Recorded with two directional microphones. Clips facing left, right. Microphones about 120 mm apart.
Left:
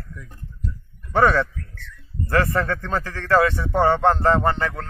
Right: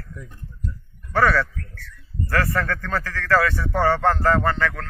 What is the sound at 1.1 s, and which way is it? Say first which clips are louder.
A man's voice: left 2 dB; 25° left (ahead or behind).